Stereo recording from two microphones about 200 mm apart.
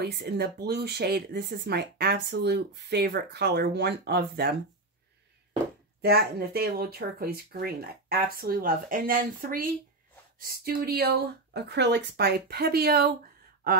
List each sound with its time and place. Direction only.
0.0 s speech: 50° right (ahead or behind)
5.9 s speech: 50° right (ahead or behind)